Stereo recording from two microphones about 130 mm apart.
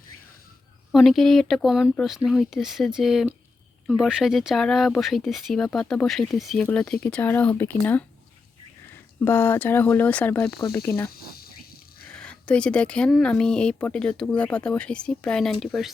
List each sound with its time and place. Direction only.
0.9 s speech: centre (ahead or behind)
9.2 s speech: 15° left (ahead or behind)
10.7 s cricket: 20° left (ahead or behind)
12.1 s speech: 5° left (ahead or behind)